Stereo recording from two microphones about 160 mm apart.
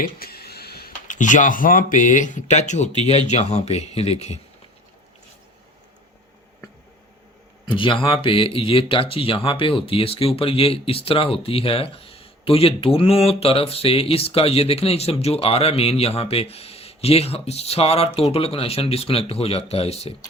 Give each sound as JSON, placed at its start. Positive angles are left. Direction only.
{"t": 0.0, "sound": "speech", "side_deg": 70}
{"t": 7.6, "sound": "speech", "side_deg": 30}